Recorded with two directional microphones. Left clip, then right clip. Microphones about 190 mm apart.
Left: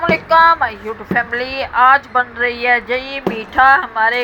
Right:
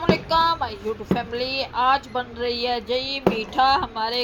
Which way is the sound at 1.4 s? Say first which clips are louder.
Left 10 dB; 30° left (ahead or behind).